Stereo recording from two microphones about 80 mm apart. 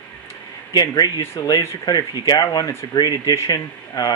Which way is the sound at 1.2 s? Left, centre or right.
Left.